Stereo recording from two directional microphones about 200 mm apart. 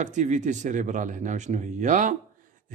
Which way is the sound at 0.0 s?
40° right (ahead or behind).